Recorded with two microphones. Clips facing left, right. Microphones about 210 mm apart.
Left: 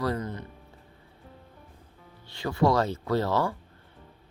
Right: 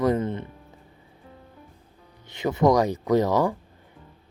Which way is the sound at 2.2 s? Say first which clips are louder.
Right 4 dB; 20° right (ahead or behind).